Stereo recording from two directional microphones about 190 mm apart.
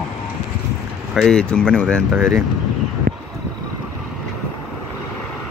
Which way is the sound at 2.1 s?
10° right (ahead or behind).